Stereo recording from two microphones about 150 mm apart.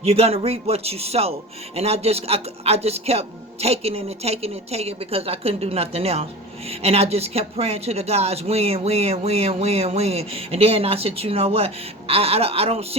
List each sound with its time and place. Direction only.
0.0 s speech: 45° right (ahead or behind)